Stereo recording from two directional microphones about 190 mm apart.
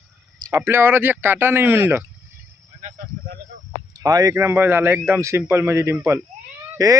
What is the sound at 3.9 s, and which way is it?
A man's voice, 20° right (ahead or behind).